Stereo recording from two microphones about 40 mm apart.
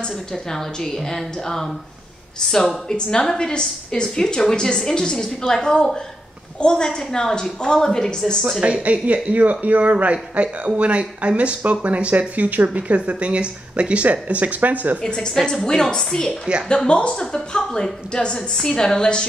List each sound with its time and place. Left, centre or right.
0.3 s a woman's voice: centre
8.8 s speech: right
15.0 s a woman's voice: centre